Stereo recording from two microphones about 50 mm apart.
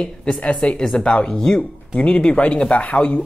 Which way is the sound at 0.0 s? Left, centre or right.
Centre.